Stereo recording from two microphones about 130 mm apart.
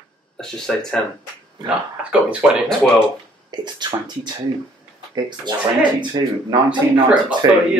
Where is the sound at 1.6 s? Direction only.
10° right (ahead or behind).